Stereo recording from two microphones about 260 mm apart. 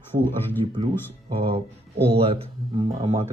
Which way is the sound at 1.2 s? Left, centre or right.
Right.